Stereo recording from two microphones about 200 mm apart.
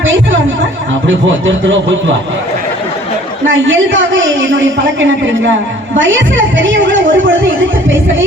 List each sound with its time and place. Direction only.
0.0 s a sound: 70° right (ahead or behind)
1.0 s a man's voice: 70° right (ahead or behind)
3.4 s a man's voice: 75° right (ahead or behind)
6.0 s a woman's voice: 70° right (ahead or behind)